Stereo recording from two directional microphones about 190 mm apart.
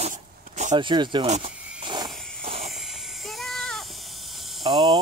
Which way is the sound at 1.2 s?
35° right (ahead or behind).